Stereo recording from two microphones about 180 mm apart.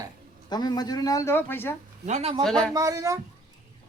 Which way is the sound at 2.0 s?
35° right (ahead or behind).